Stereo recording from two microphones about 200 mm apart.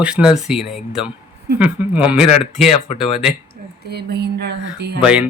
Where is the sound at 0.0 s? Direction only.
5° right (ahead or behind).